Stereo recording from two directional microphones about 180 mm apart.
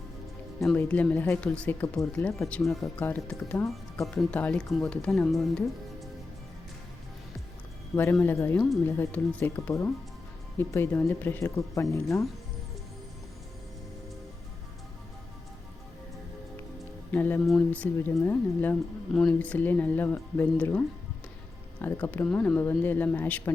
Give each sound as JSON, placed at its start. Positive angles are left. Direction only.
{"t": 0.6, "sound": "speech", "side_deg": 5}
{"t": 8.2, "sound": "speech", "side_deg": 15}
{"t": 17.1, "sound": "speech", "side_deg": 10}